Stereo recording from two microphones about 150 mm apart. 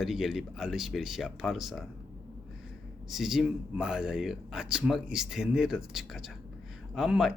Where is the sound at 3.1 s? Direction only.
Centre (ahead or behind).